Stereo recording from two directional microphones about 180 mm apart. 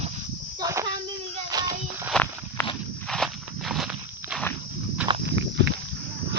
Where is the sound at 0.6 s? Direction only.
15° right (ahead or behind).